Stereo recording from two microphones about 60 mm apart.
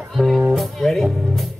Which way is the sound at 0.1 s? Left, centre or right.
Centre.